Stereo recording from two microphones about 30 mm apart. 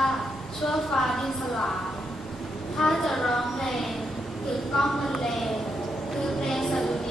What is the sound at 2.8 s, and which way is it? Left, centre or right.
A woman's voice, centre.